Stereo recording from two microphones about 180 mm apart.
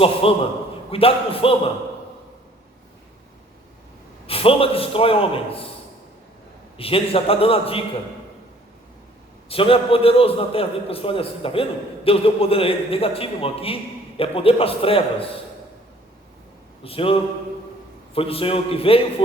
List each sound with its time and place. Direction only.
0.0 s a man's voice: 30° left (ahead or behind)
4.3 s a man's voice: 30° left (ahead or behind)
6.7 s a man's voice: 30° left (ahead or behind)
9.5 s a man's voice: 30° left (ahead or behind)
16.8 s a man's voice: 30° left (ahead or behind)